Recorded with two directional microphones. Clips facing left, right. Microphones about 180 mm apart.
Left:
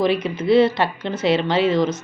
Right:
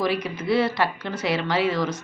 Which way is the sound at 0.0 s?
25° left (ahead or behind).